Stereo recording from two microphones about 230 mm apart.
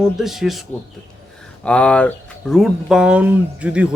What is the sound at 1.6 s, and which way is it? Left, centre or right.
Speech, centre.